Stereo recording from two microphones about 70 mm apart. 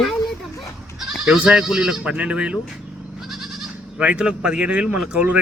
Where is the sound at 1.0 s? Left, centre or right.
Centre.